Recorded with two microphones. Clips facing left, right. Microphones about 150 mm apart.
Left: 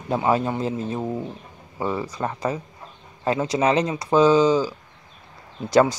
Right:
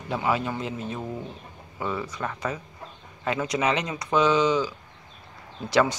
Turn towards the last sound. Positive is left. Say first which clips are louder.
# left 5 dB
turn(degrees=40)  # may be behind; listen again after turning